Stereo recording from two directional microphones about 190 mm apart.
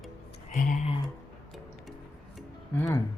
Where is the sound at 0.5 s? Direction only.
45° left (ahead or behind).